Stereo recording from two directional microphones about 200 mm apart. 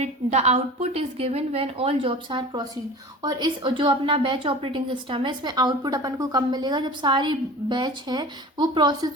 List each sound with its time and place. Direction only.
0.0 s a woman's voice: 35° right (ahead or behind)